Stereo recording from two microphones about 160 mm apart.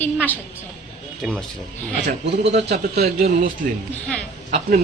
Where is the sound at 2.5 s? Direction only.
90° right.